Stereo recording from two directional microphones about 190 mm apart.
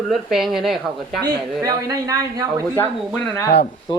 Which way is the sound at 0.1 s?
Centre (ahead or behind).